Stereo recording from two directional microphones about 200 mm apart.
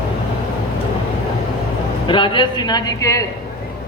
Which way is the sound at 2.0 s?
25° left (ahead or behind).